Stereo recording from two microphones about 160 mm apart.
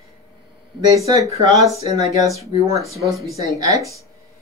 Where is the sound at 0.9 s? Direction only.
20° right (ahead or behind).